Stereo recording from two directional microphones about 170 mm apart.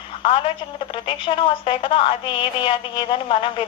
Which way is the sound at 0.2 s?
30° left (ahead or behind).